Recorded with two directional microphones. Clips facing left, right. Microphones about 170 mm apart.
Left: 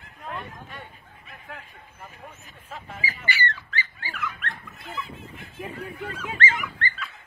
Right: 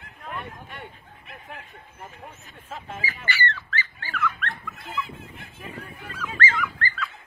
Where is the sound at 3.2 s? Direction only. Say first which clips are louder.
Right 1 dB; 15° left (ahead or behind).